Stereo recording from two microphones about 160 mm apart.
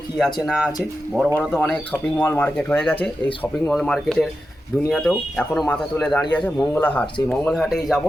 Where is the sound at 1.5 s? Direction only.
10° left (ahead or behind).